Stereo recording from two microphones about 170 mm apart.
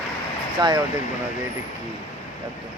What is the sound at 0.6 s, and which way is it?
Speech, 25° right (ahead or behind).